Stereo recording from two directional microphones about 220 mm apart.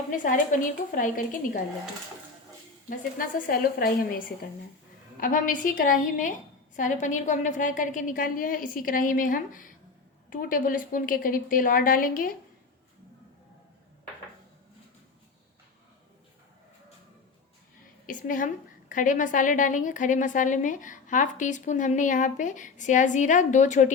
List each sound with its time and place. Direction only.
0.3 s a woman's voice: 40° left (ahead or behind)
2.9 s a woman's voice: 40° left (ahead or behind)
5.2 s a woman's voice: 40° left (ahead or behind)
18.0 s a woman's voice: 35° left (ahead or behind)